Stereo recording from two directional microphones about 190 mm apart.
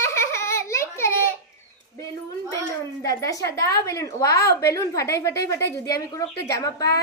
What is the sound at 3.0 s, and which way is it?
A woman's voice, 15° left (ahead or behind).